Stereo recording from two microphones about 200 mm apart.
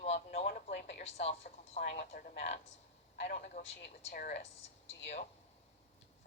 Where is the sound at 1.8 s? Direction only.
40° left (ahead or behind).